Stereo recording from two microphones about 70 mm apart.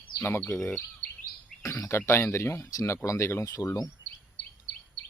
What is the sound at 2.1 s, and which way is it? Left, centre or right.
Speech, left.